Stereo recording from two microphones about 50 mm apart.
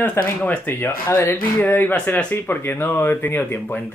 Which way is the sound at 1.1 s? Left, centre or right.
Left.